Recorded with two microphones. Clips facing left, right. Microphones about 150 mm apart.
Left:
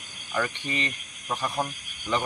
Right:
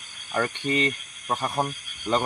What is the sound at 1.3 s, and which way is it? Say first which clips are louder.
Speech: right 2 dB; 50° right (ahead or behind).